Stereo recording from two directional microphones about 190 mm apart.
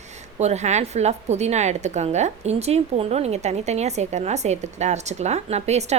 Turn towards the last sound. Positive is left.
turn(degrees=-35)  # may be behind; listen again after turning